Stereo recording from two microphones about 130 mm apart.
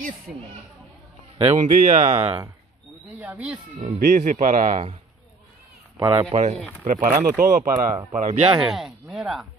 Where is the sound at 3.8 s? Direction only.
80° right.